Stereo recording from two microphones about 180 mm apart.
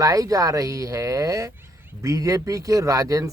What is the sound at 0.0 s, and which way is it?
Speech, 20° right (ahead or behind).